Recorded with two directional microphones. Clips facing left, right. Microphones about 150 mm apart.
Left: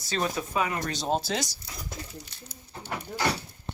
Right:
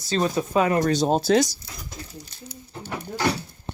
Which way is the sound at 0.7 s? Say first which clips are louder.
Right 9 dB; 45° right (ahead or behind).